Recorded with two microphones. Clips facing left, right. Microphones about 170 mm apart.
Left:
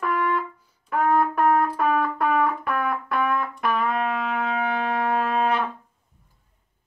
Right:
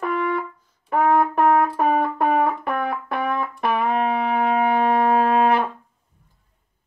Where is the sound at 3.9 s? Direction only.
25° right (ahead or behind).